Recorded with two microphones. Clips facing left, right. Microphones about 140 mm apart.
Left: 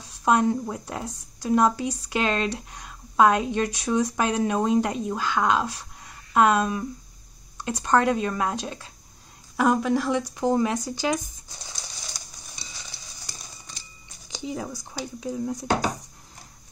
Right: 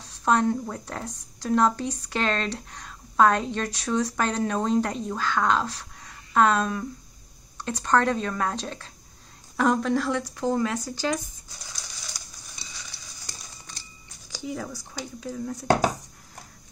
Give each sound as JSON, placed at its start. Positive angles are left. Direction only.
{"t": 0.2, "sound": "speech", "side_deg": 10}
{"t": 12.1, "sound": "a sound", "side_deg": 25}
{"t": 14.3, "sound": "speech", "side_deg": 20}